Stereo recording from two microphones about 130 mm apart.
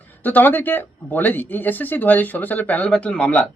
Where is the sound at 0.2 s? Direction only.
15° left (ahead or behind).